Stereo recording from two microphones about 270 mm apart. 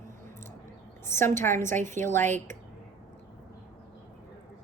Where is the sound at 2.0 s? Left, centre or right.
Centre.